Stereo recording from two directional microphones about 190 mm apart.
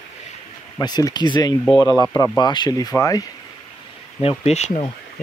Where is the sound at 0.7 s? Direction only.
20° left (ahead or behind).